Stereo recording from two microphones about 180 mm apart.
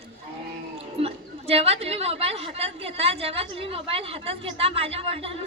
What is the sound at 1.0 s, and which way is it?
A woman's voice, 35° right (ahead or behind).